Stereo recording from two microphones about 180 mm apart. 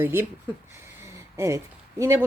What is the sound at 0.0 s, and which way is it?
Speech, 10° right (ahead or behind).